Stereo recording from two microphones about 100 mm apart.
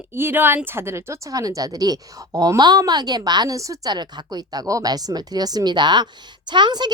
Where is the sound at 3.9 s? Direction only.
45° right (ahead or behind).